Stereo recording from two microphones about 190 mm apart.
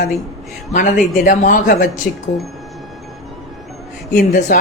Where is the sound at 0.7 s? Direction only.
40° left (ahead or behind).